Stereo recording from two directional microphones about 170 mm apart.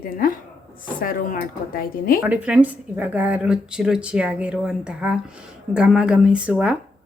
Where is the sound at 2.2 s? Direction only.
10° right (ahead or behind).